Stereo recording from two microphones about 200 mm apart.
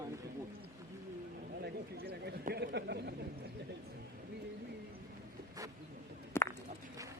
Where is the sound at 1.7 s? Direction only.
50° right (ahead or behind).